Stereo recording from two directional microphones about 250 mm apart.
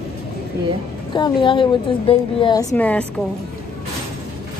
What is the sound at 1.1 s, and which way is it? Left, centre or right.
A woman's voice, centre.